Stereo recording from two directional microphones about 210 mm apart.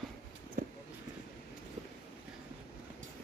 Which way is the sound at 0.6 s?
40° right (ahead or behind).